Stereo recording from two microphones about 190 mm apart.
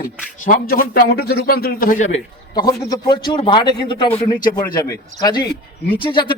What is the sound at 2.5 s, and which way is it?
Speech, 20° left (ahead or behind).